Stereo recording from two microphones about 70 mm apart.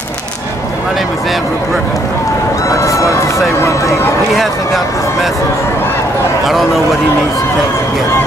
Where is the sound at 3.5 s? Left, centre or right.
Left.